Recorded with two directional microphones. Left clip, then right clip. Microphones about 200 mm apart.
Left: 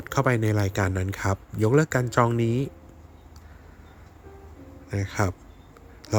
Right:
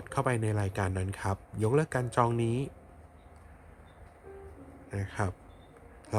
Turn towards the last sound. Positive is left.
turn(degrees=20)  # may be behind; listen again after turning